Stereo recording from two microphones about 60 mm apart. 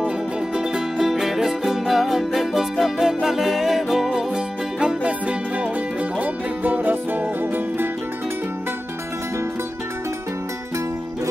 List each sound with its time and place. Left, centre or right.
0.6 s music: centre
4.7 s music: centre; by 7.9 s right